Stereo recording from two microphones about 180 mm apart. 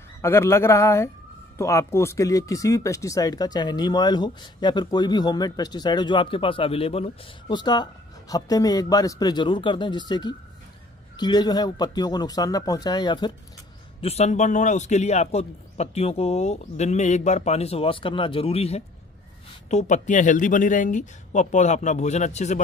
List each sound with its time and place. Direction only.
0.2 s a man's voice: 15° left (ahead or behind)
14.0 s a man's voice: 35° left (ahead or behind)